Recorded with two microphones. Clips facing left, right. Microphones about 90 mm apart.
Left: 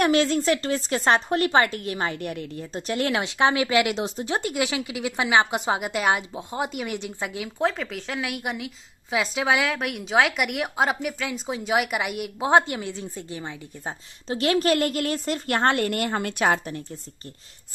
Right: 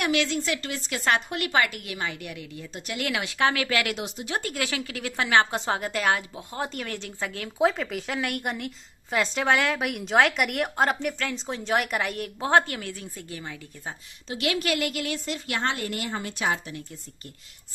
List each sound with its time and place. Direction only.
0.0 s speech: 40° left (ahead or behind); by 4.0 s 20° left (ahead or behind)
4.0 s speech: 35° left (ahead or behind)
4.4 s a woman's voice: 20° left (ahead or behind)
7.5 s a woman's voice: centre (ahead or behind); by 16.7 s 55° left (ahead or behind)